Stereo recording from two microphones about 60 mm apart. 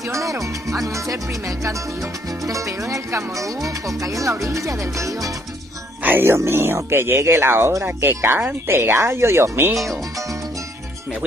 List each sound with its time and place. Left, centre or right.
0.1 s music: right
2.4 s speech: right
6.0 s speech: right